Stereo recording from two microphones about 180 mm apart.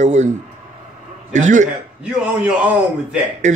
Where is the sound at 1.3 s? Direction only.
45° right (ahead or behind).